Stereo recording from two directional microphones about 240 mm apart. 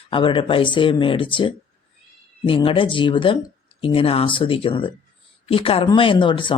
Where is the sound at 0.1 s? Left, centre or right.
Left.